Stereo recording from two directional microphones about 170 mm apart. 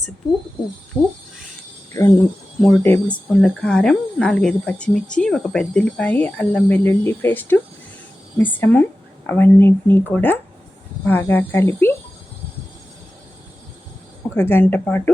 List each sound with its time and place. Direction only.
0.9 s speech: 5° left (ahead or behind)
2.0 s a woman's voice: 20° left (ahead or behind)
14.3 s a woman's voice: 15° left (ahead or behind)